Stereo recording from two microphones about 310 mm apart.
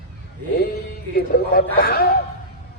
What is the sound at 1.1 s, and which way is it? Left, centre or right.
Speech, left.